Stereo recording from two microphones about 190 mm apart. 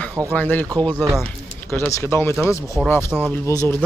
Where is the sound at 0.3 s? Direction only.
10° left (ahead or behind).